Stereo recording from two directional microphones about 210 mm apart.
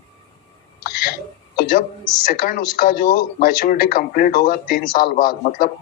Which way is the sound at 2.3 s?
45° left (ahead or behind).